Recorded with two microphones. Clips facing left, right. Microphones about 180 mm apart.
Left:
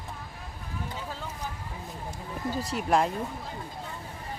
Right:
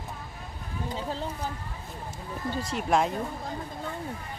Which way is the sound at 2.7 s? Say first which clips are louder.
Even; centre (ahead or behind).